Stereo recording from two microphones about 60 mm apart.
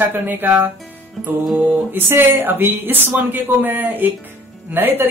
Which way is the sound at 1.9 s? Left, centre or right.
Right.